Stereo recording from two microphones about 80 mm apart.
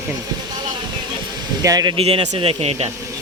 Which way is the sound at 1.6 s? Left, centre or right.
Right.